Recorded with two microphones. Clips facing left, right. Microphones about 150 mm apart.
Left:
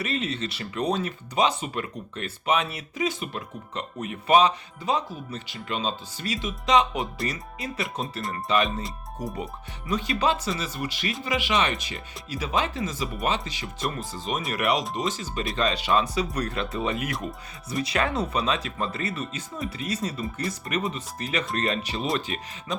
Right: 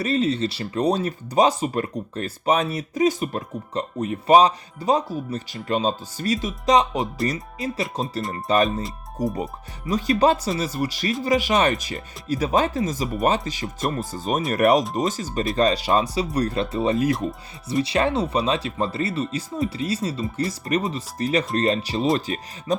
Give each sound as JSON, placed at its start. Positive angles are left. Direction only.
{"t": 0.0, "sound": "speech", "side_deg": -35}
{"t": 9.9, "sound": "speech", "side_deg": -40}